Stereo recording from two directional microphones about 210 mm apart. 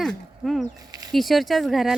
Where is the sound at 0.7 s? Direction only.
15° right (ahead or behind).